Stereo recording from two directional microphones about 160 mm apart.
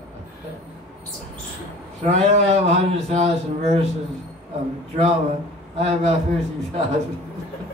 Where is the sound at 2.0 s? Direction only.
40° right (ahead or behind).